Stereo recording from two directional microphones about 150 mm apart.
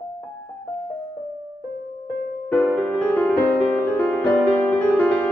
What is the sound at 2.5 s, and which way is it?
Music, 10° left (ahead or behind).